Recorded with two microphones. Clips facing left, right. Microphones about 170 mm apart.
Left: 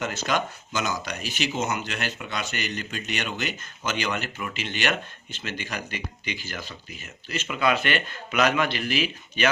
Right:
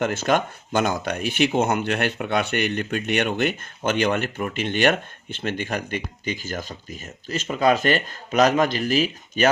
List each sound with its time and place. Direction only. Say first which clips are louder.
0.0 s speech: right 6 dB; 50° right (ahead or behind)